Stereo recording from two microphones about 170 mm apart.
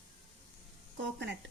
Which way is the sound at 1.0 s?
90° right.